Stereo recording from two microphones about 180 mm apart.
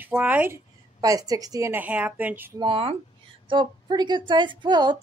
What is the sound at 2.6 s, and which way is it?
Speech, 30° right (ahead or behind).